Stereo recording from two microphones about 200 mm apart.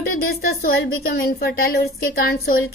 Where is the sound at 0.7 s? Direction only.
50° left (ahead or behind).